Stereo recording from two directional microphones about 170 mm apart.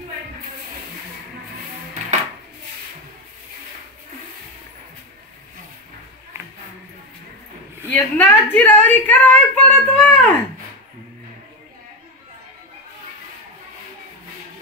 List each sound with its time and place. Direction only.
7.9 s a woman's voice: 10° left (ahead or behind)